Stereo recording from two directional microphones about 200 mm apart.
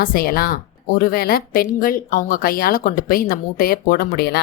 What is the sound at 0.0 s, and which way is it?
Speech, 45° left (ahead or behind).